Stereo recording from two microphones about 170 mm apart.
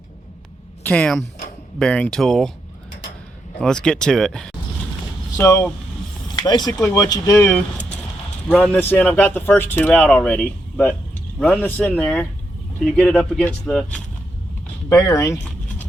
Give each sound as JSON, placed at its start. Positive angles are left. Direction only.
{"t": 0.9, "sound": "speech", "side_deg": 5}
{"t": 3.6, "sound": "speech", "side_deg": 5}
{"t": 5.4, "sound": "speech", "side_deg": 15}
{"t": 14.8, "sound": "speech", "side_deg": 20}